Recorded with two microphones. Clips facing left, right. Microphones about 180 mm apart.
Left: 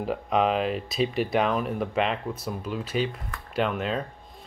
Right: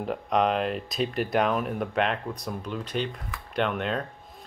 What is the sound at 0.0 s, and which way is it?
Speech, centre (ahead or behind).